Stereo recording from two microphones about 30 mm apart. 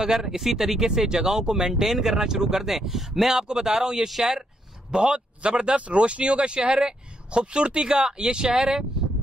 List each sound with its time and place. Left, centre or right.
0.0 s speech: centre
0.8 s speech: right
2.7 s speech: centre
4.9 s speech: right